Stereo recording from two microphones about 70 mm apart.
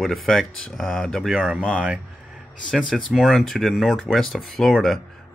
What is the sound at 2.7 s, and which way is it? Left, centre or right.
Speech, centre.